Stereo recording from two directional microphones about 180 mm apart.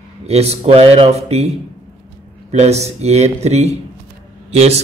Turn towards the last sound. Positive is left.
turn(degrees=-35)  # may be behind; listen again after turning